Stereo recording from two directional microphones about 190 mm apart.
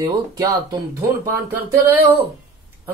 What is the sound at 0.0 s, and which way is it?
Speech, 20° right (ahead or behind).